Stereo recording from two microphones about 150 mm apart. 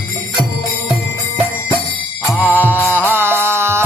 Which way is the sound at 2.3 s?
10° right (ahead or behind).